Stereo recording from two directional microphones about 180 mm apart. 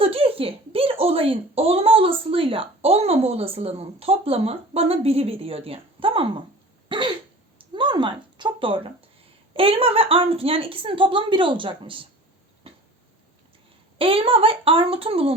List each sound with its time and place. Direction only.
0.0 s a child's voice: 30° right (ahead or behind)
6.8 s throat clearing: 25° right (ahead or behind)
7.6 s speech: 25° right (ahead or behind)
12.7 s a sound: 30° right (ahead or behind)
14.0 s a child's voice: 30° right (ahead or behind)